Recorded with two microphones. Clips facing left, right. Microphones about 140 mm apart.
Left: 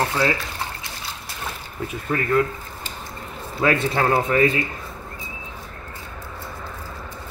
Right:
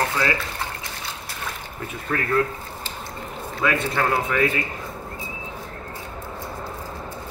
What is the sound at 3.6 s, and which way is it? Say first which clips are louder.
Speech: left 3 dB; 30° left (ahead or behind).